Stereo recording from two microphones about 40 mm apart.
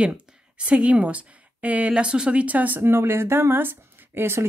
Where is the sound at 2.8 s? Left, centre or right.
Right.